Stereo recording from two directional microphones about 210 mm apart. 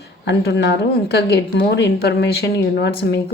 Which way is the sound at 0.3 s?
55° left (ahead or behind).